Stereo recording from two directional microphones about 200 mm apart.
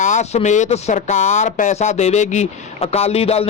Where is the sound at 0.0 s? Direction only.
35° left (ahead or behind).